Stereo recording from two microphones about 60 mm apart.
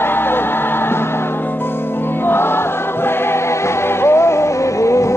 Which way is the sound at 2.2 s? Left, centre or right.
Left.